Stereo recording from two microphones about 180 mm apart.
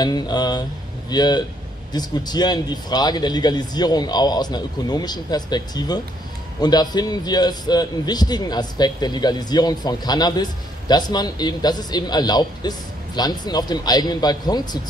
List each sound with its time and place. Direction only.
0.0 s a man's voice: 25° left (ahead or behind)